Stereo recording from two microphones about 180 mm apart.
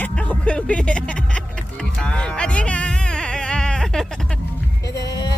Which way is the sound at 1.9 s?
5° left (ahead or behind).